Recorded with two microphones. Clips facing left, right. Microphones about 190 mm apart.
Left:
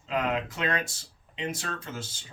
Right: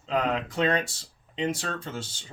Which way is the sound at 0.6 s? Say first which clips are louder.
Right 5 dB; 30° right (ahead or behind).